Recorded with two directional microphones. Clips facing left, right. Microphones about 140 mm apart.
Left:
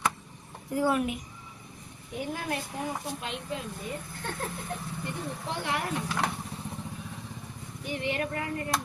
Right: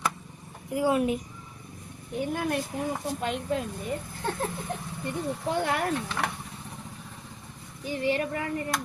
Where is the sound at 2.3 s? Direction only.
55° right (ahead or behind).